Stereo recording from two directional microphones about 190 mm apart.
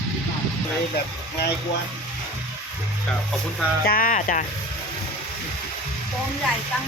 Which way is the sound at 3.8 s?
50° left (ahead or behind).